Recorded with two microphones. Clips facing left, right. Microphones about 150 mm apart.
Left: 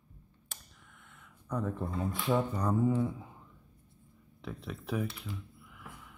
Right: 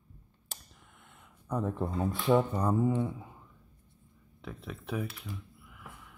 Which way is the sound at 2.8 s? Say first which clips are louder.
Even; 5° right (ahead or behind).